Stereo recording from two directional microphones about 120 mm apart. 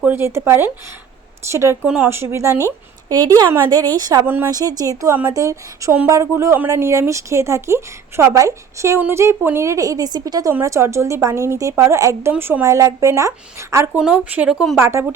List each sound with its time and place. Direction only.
0.0 s a woman's voice: 20° right (ahead or behind)
4.3 s a woman's voice: 20° right (ahead or behind)
4.5 s a woman's voice: 30° right (ahead or behind)
13.9 s speech: 10° right (ahead or behind)
14.8 s a woman's voice: 20° right (ahead or behind)